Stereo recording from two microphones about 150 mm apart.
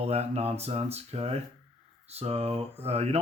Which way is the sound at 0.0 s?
45° right (ahead or behind).